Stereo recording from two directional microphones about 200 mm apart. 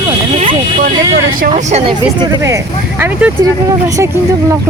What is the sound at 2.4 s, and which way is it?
Speech, 15° right (ahead or behind).